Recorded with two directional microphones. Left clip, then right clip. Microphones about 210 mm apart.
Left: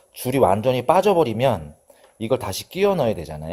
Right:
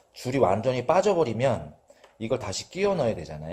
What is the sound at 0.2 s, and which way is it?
Speech, 40° left (ahead or behind).